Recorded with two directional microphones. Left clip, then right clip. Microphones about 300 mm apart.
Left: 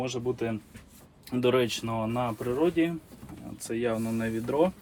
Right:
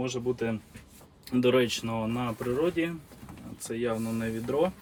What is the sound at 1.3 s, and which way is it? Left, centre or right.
Speech, centre.